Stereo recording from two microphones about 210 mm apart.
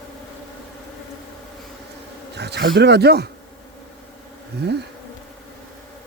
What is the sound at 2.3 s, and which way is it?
Speech, 55° right (ahead or behind).